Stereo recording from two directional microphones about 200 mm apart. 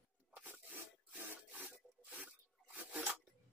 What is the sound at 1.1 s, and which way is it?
Rub, 5° right (ahead or behind).